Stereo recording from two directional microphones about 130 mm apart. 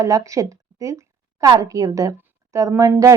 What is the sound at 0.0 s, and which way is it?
A woman's voice, 25° right (ahead or behind).